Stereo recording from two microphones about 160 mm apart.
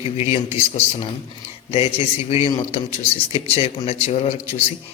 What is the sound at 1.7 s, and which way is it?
A man's voice, 35° left (ahead or behind).